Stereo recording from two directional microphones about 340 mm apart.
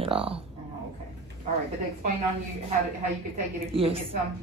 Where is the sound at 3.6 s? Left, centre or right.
Centre.